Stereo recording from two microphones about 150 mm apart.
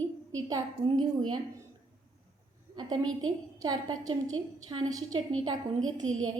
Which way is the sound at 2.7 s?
30° right (ahead or behind).